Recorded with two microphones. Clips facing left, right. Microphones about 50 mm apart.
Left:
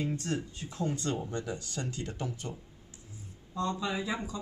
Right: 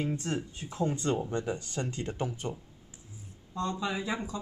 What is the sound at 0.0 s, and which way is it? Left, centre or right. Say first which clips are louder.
Speech: right 1 dB; right.